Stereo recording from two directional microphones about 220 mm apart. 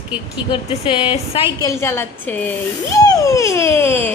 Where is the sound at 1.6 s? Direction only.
15° left (ahead or behind).